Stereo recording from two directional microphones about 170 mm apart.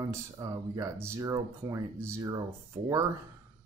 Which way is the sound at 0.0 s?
20° right (ahead or behind).